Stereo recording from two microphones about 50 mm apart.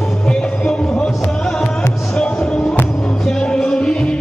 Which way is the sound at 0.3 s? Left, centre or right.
Centre.